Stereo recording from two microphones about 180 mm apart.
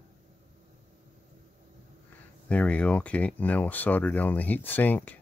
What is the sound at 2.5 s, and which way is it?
Speech, 5° left (ahead or behind).